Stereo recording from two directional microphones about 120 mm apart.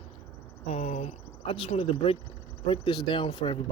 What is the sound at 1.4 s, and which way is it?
Speech, 45° left (ahead or behind).